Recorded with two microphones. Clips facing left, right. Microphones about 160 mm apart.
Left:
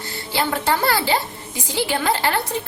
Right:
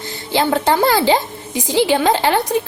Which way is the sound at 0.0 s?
20° right (ahead or behind).